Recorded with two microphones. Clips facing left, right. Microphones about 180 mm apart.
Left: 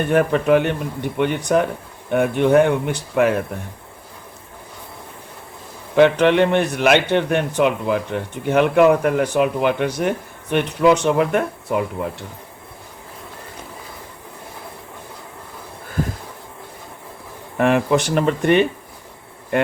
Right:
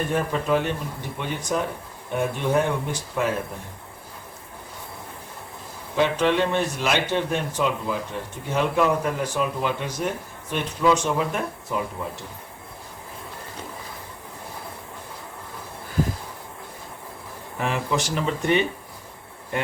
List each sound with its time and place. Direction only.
0.1 s a man's voice: 65° left (ahead or behind)
6.0 s a man's voice: 65° left (ahead or behind)
17.6 s a man's voice: 60° left (ahead or behind)